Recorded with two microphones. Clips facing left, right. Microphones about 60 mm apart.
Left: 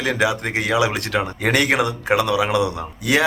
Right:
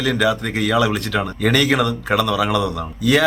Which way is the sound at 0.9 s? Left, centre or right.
Left.